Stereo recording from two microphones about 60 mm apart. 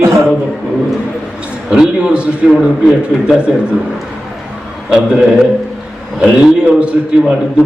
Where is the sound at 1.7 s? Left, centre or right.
Centre.